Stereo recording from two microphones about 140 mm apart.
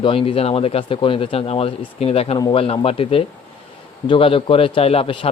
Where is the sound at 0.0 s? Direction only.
40° left (ahead or behind).